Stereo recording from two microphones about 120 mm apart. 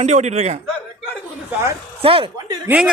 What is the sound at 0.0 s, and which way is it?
Speech, 70° right (ahead or behind).